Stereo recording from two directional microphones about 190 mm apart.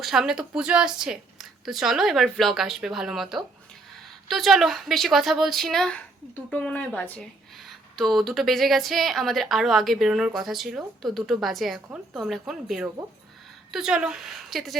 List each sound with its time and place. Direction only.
0.0 s speech: 5° right (ahead or behind)